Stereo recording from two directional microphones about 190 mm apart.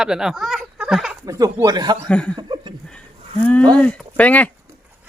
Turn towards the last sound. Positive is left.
turn(degrees=5)  # may be behind; listen again after turning